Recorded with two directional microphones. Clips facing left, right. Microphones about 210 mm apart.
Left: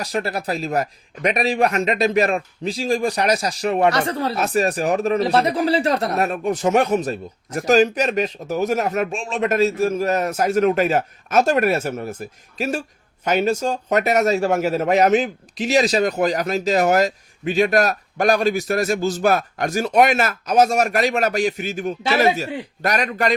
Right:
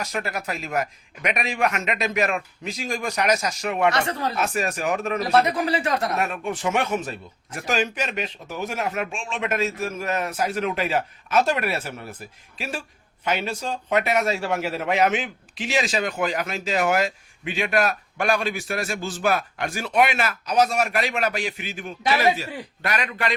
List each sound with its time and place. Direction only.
0.0 s speech: 35° left (ahead or behind)